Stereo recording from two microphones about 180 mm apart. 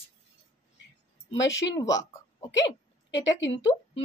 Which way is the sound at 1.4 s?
90° left.